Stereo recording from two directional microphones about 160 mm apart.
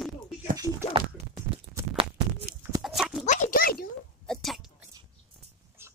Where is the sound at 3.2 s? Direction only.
50° left (ahead or behind); by 3.9 s 65° left (ahead or behind).